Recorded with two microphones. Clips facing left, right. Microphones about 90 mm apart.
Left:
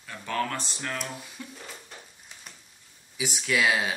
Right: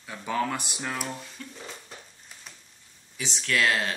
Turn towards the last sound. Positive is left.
turn(degrees=10)  # may be behind; listen again after turning